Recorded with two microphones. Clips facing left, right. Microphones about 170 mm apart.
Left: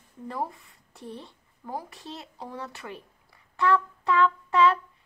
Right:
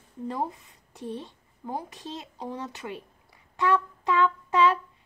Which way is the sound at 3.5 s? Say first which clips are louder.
Left 1 dB; 15° right (ahead or behind).